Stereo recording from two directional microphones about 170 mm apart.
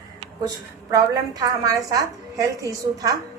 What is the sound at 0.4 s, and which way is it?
A woman's voice, 20° right (ahead or behind).